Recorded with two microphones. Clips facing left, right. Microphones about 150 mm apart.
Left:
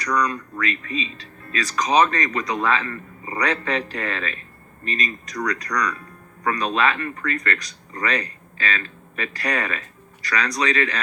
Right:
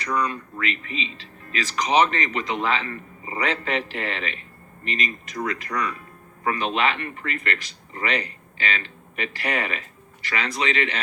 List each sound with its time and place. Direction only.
0.0 s speech: 25° right (ahead or behind)